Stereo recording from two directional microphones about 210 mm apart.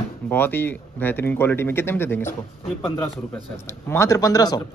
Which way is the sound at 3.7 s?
10° left (ahead or behind).